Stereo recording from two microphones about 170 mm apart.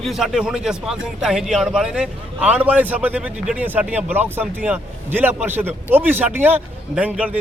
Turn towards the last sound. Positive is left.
turn(degrees=-10)  # may be behind; listen again after turning